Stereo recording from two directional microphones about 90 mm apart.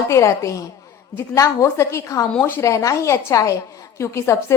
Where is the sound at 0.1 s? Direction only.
35° left (ahead or behind).